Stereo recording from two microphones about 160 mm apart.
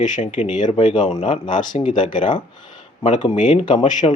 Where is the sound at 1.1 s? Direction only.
40° left (ahead or behind).